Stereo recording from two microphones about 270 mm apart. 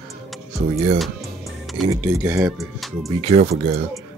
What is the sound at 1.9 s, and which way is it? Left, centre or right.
Speech, centre.